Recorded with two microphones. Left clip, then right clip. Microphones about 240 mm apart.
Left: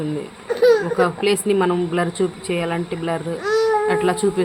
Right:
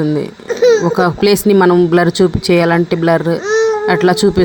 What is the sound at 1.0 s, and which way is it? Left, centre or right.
Speech, right.